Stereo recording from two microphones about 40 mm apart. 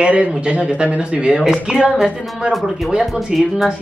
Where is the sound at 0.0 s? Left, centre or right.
Right.